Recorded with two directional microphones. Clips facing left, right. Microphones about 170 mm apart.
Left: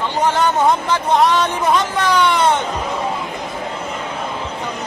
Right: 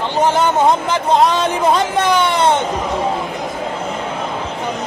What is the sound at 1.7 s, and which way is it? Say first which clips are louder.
Speech: right 1 dB; 25° right (ahead or behind).